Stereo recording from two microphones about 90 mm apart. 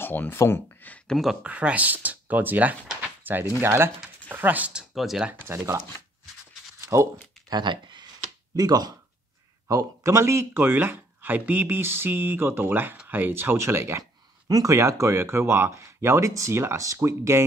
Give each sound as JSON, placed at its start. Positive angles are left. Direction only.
{"t": 0.0, "sound": "speech", "side_deg": 25}
{"t": 1.1, "sound": "speech", "side_deg": 0}
{"t": 1.4, "sound": "speech", "side_deg": -15}
{"t": 4.9, "sound": "speech", "side_deg": -5}
{"t": 5.5, "sound": "speech", "side_deg": -30}
{"t": 6.9, "sound": "speech", "side_deg": -40}
{"t": 7.4, "sound": "a sound", "side_deg": -55}
{"t": 8.5, "sound": "speech", "side_deg": -45}
{"t": 9.7, "sound": "speech", "side_deg": -35}
{"t": 14.5, "sound": "speech", "side_deg": -40}